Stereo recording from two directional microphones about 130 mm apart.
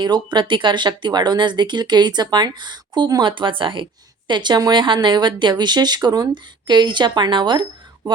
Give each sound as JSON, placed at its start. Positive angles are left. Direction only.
{"t": 0.0, "sound": "speech", "side_deg": -35}